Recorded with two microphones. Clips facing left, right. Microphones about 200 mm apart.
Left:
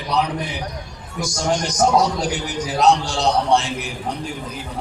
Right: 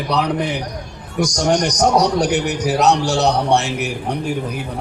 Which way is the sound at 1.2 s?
75° right (ahead or behind).